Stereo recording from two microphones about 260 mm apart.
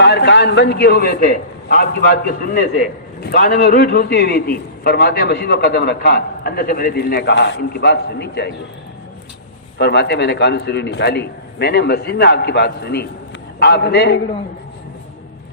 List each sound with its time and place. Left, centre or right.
0.0 s a man's voice: left
9.7 s a man's voice: left